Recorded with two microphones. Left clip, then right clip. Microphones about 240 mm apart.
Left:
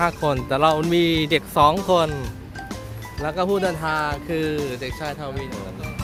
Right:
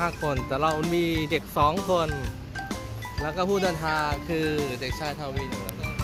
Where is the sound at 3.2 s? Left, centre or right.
Centre.